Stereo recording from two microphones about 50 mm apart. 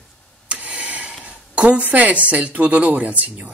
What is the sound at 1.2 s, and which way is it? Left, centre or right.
Speech, right.